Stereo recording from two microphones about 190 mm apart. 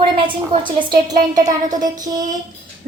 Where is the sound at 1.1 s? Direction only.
40° right (ahead or behind).